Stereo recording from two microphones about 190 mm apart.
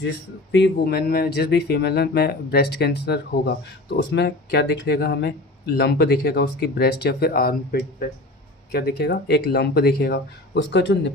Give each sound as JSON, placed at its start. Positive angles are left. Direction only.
{"t": 0.5, "sound": "speech", "side_deg": 60}